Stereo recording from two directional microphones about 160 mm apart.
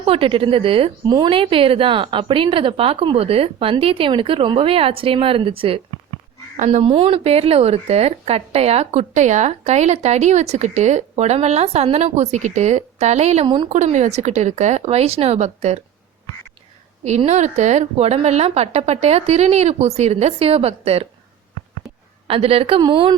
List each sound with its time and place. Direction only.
0.0 s a woman's voice: 35° right (ahead or behind)
17.0 s a woman's voice: 45° right (ahead or behind)
22.3 s a woman's voice: 35° right (ahead or behind)